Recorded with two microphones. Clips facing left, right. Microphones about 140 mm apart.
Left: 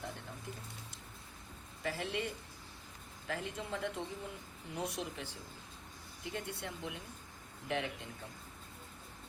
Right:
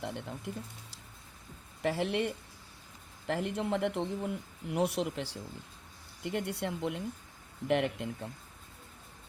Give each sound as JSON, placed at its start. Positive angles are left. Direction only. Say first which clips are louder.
{"t": 0.0, "sound": "speech", "louder": "right 7 dB", "side_deg": -75}